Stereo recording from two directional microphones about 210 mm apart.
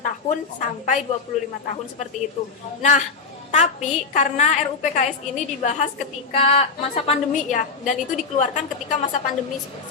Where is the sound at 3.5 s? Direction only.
35° left (ahead or behind).